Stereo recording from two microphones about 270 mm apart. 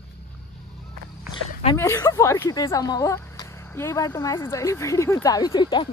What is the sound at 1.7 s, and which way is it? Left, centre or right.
Speech, centre.